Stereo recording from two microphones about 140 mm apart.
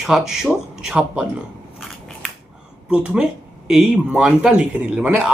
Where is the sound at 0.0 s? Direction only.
5° right (ahead or behind).